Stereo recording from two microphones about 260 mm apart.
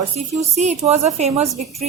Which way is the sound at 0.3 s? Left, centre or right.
Right.